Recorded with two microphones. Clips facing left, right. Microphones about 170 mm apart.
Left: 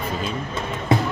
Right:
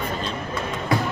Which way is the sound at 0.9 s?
25° left (ahead or behind).